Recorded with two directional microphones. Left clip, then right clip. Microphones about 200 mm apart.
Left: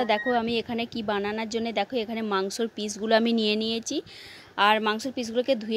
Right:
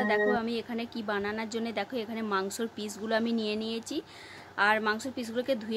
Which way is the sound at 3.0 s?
35° left (ahead or behind).